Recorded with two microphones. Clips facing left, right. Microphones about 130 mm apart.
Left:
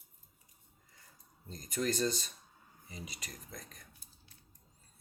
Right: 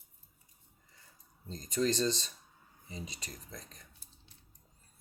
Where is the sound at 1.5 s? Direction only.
30° right (ahead or behind).